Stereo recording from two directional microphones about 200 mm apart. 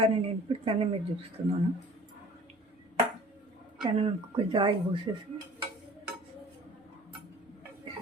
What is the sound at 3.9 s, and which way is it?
Speech, 25° right (ahead or behind).